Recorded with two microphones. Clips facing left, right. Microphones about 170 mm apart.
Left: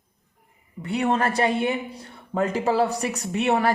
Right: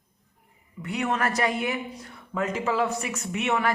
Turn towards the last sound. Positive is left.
turn(degrees=35)  # may be behind; listen again after turning